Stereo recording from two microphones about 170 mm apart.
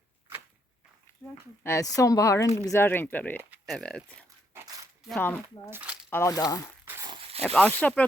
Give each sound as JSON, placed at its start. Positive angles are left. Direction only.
{"t": 1.2, "sound": "a woman's voice", "side_deg": 10}
{"t": 3.5, "sound": "speech", "side_deg": 0}
{"t": 5.7, "sound": "speech", "side_deg": -5}
{"t": 6.1, "sound": "a woman's voice", "side_deg": 15}
{"t": 6.8, "sound": "a sound", "side_deg": -15}
{"t": 7.1, "sound": "zipper", "side_deg": -35}
{"t": 7.4, "sound": "speech", "side_deg": 10}